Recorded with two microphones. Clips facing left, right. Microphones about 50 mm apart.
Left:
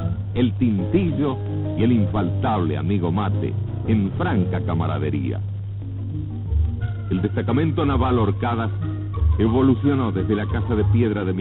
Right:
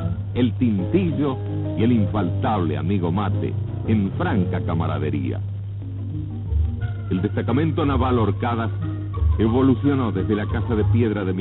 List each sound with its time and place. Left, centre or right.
0.0 s speech: right
7.1 s speech: right